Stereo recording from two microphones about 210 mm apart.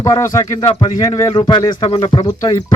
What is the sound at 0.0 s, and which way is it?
Speech, 15° left (ahead or behind).